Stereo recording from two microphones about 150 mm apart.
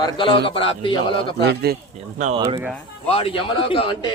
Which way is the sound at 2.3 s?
35° right (ahead or behind).